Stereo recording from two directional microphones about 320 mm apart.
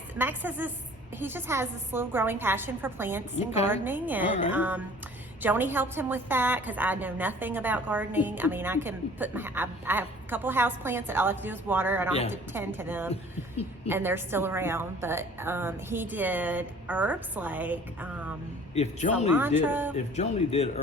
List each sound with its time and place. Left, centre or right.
0.2 s a woman's voice: centre
3.3 s speech: centre
3.7 s a woman's voice: centre
18.7 s speech: left
19.3 s a woman's voice: centre
20.1 s speech: centre